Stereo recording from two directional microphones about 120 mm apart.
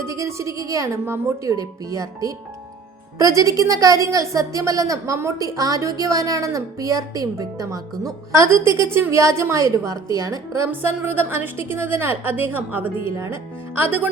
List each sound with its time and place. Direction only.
0.0 s a woman's voice: 25° right (ahead or behind)